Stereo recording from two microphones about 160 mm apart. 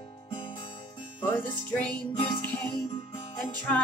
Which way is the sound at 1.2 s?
10° left (ahead or behind).